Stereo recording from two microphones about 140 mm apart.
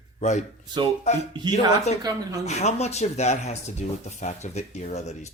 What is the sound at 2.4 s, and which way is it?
Speech, 50° left (ahead or behind).